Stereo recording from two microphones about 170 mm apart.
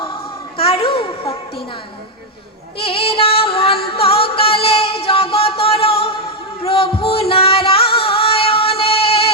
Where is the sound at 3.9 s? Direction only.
35° left (ahead or behind).